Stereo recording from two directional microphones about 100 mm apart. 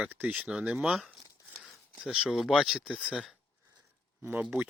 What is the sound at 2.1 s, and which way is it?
Speech, 5° right (ahead or behind).